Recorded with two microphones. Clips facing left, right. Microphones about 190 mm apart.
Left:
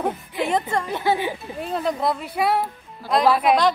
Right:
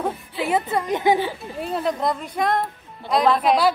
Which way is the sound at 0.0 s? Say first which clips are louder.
Left 1 dB; 5° right (ahead or behind).